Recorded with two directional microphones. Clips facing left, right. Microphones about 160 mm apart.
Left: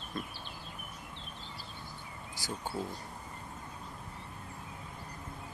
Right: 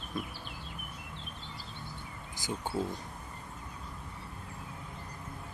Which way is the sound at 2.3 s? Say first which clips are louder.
Right 3 dB; 20° right (ahead or behind).